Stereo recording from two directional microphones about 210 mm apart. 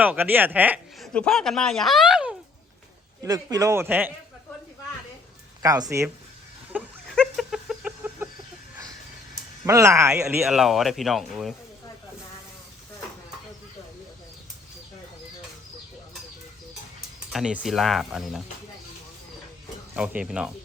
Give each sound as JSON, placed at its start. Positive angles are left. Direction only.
{"t": 0.0, "sound": "a man's voice", "side_deg": -10}
{"t": 3.2, "sound": "speech", "side_deg": -15}
{"t": 5.6, "sound": "speech", "side_deg": -15}
{"t": 6.7, "sound": "chicken", "side_deg": 0}
{"t": 9.6, "sound": "speech", "side_deg": -15}
{"t": 10.4, "sound": "a man's voice", "side_deg": 0}
{"t": 17.3, "sound": "a man's voice", "side_deg": -5}
{"t": 20.0, "sound": "a man's voice", "side_deg": -5}